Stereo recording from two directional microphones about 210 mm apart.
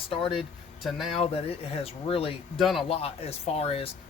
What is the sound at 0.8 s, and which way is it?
Speech, centre (ahead or behind).